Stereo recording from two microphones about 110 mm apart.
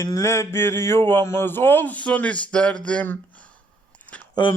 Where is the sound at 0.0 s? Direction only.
25° left (ahead or behind).